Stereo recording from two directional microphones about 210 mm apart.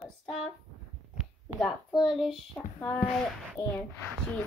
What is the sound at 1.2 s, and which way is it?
Heart sounds, centre (ahead or behind).